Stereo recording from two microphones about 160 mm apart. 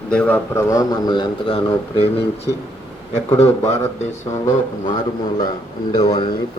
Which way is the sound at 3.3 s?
40° left (ahead or behind).